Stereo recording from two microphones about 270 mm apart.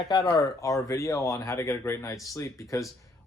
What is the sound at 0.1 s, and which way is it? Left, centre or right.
Speech, centre.